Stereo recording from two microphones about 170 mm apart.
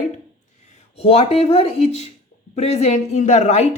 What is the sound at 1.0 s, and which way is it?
A woman's voice, 35° left (ahead or behind).